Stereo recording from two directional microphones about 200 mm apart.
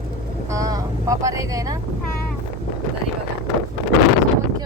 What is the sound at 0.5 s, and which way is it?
Speech, 15° right (ahead or behind).